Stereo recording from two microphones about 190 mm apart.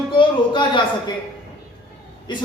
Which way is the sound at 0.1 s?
25° left (ahead or behind).